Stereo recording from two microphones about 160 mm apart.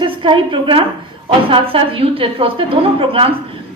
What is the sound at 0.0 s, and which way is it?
A woman's voice, 30° right (ahead or behind).